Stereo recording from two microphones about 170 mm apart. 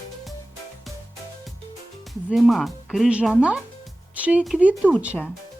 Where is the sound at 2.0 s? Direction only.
Centre (ahead or behind).